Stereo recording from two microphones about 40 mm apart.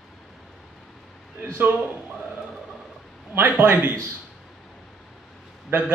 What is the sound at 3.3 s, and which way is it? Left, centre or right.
Speech, right.